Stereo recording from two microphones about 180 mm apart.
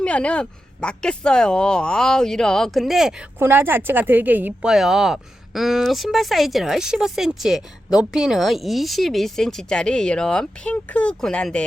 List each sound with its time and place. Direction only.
0.0 s speech: 5° left (ahead or behind)